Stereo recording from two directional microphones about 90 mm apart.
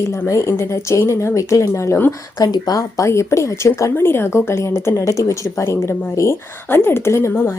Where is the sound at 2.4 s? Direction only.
45° left (ahead or behind).